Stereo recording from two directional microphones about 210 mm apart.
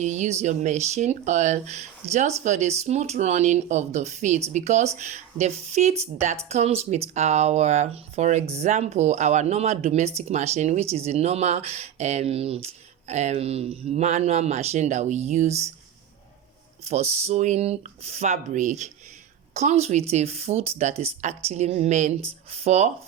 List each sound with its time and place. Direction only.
0.0 s speech: 35° right (ahead or behind)
16.9 s speech: 30° right (ahead or behind)